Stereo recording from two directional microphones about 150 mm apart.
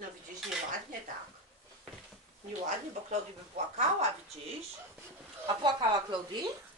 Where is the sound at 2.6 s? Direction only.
50° right (ahead or behind).